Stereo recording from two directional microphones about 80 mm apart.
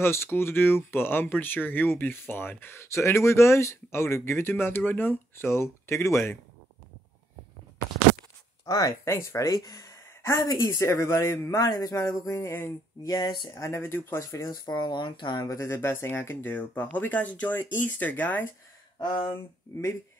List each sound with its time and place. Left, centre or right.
0.0 s speech: left
8.6 s a man's voice: left
9.1 s speech: left
9.5 s a sound: left
10.4 s a man's voice: left
12.0 s speech: left
13.0 s a man's voice: left
13.6 s speech: left
14.2 s speech: left
14.7 s speech: left
15.4 s speech: left
18.9 s speech: left
19.7 s speech: left